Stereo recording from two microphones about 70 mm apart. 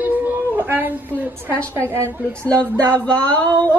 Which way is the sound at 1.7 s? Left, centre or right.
Right.